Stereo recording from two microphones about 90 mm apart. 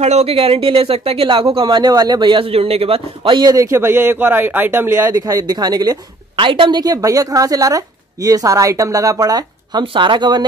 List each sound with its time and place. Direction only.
0.3 s speech: 90° right
1.7 s a man's voice: 45° right (ahead or behind); by 3.4 s 75° right (ahead or behind)
3.4 s a man's voice: 35° right (ahead or behind)
3.7 s a man's voice: 25° right (ahead or behind)
5.1 s speech: 40° right (ahead or behind)
6.3 s speech: 70° right (ahead or behind)